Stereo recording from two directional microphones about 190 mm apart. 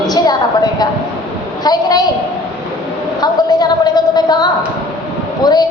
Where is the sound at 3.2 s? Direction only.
20° left (ahead or behind).